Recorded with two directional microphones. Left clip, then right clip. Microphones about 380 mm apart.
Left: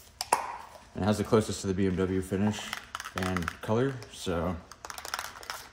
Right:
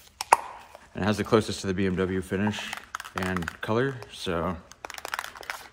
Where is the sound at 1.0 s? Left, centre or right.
Centre.